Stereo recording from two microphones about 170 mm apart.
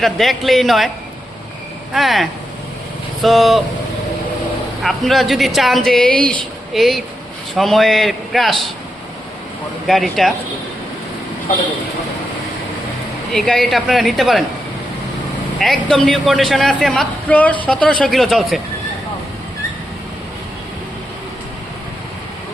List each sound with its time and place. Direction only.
0.0 s a man's voice: centre (ahead or behind)
1.9 s a man's voice: centre (ahead or behind)
3.2 s a man's voice: centre (ahead or behind)
4.8 s a man's voice: centre (ahead or behind)
9.8 s a man's voice: centre (ahead or behind)
13.3 s a man's voice: 5° left (ahead or behind)
15.5 s a man's voice: centre (ahead or behind)